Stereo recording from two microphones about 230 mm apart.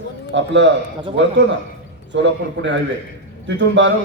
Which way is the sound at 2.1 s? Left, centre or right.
Right.